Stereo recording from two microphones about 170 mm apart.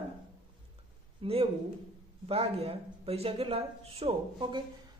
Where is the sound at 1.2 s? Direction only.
35° right (ahead or behind).